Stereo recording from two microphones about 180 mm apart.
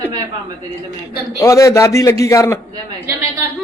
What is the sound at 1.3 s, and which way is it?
A man's voice, 20° left (ahead or behind).